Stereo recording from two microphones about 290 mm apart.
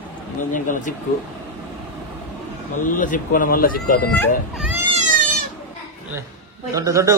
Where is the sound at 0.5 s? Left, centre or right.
Left.